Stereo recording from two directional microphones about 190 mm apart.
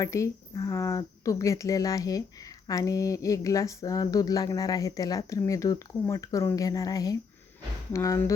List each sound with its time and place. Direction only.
0.0 s speech: 15° left (ahead or behind)